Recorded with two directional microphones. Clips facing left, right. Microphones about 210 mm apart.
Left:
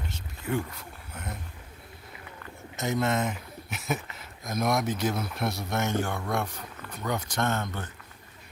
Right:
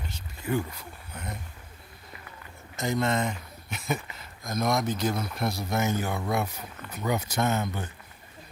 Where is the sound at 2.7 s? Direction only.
5° left (ahead or behind).